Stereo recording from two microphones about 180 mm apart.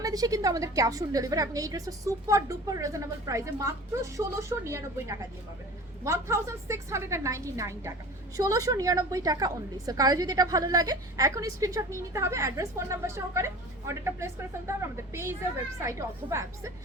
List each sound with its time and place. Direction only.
0.0 s a woman's voice: 20° right (ahead or behind)